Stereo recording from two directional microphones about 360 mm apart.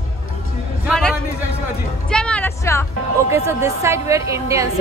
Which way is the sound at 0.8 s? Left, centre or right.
Centre.